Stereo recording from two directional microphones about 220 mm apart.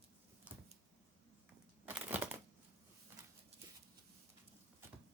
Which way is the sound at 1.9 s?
10° right (ahead or behind).